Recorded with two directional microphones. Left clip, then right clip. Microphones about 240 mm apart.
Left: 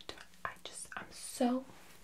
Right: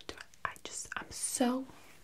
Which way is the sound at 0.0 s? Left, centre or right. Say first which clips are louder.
Right 3 dB; right.